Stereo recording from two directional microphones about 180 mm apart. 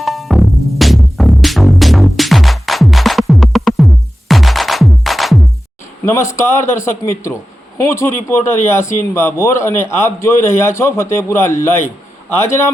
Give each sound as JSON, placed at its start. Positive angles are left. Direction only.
{"t": 0.0, "sound": "music", "side_deg": 0}
{"t": 6.3, "sound": "a man's voice", "side_deg": 15}